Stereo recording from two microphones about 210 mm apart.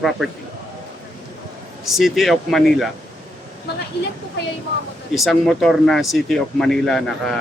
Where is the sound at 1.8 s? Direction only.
Centre (ahead or behind).